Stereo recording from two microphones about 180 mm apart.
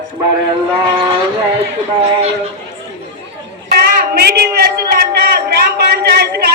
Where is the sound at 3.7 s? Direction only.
55° right (ahead or behind).